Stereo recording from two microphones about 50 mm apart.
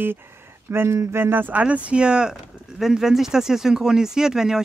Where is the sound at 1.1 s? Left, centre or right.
Right.